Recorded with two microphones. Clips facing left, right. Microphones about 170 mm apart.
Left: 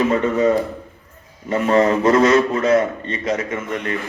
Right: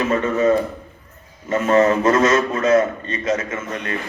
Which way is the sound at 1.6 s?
30° left (ahead or behind).